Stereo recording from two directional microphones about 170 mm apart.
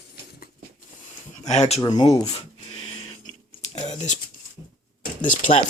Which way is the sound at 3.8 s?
45° left (ahead or behind).